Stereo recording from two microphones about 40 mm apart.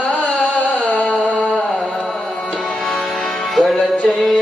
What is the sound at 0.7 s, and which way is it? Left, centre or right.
Music, left.